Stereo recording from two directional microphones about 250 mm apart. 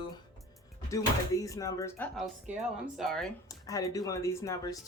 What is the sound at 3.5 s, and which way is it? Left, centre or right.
Speech, centre.